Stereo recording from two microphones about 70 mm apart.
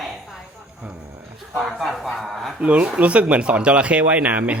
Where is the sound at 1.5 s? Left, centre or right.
Centre.